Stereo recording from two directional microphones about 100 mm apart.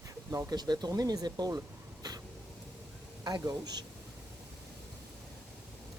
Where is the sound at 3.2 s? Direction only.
40° right (ahead or behind).